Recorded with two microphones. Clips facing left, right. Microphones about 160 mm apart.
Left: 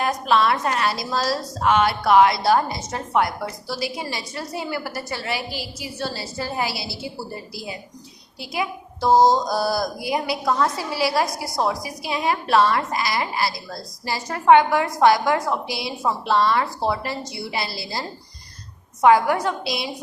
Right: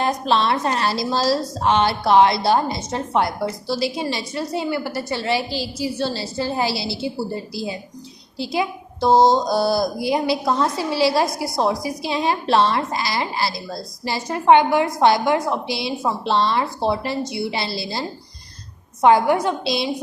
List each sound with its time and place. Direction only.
0.0 s a woman's voice: 30° right (ahead or behind)
19.0 s a woman's voice: 25° right (ahead or behind)